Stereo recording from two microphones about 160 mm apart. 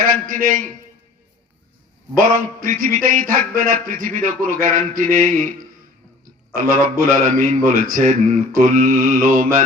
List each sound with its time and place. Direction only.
0.0 s a man's voice: 55° right (ahead or behind)
2.1 s a man's voice: 60° right (ahead or behind)
6.5 s a man's voice: 55° right (ahead or behind)